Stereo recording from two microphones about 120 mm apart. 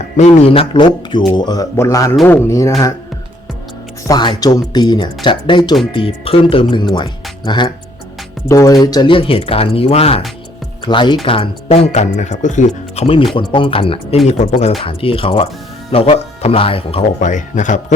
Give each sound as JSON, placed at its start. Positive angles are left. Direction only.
{"t": 0.2, "sound": "speech", "side_deg": 65}
{"t": 1.7, "sound": "music", "side_deg": 25}
{"t": 4.0, "sound": "speech", "side_deg": 35}
{"t": 10.8, "sound": "speech", "side_deg": 40}
{"t": 11.3, "sound": "speech", "side_deg": 50}
{"t": 13.3, "sound": "speech", "side_deg": 45}
{"t": 17.2, "sound": "speech", "side_deg": 90}